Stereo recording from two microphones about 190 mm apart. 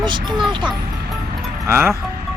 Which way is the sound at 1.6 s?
15° right (ahead or behind).